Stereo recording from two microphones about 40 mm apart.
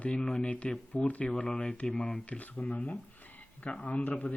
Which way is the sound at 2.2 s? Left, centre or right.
Left.